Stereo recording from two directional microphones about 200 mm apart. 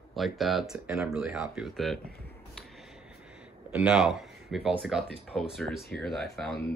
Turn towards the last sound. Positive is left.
turn(degrees=0)  # may be behind; listen again after turning